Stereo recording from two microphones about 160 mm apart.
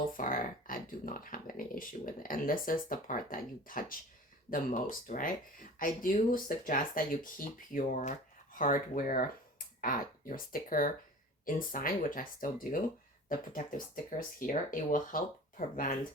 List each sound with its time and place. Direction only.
0.2 s speech: 60° left (ahead or behind)